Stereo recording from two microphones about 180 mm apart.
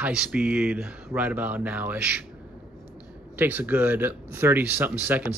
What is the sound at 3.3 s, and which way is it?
Speech, 10° right (ahead or behind).